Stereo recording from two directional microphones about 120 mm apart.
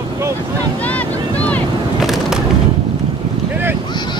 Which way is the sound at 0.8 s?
10° left (ahead or behind).